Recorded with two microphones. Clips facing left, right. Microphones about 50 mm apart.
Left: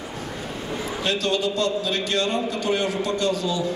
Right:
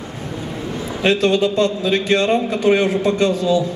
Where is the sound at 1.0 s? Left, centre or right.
Right.